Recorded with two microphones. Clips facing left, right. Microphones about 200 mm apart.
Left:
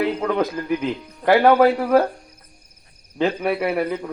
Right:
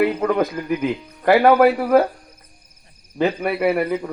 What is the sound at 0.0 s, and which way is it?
A man's voice, 5° right (ahead or behind).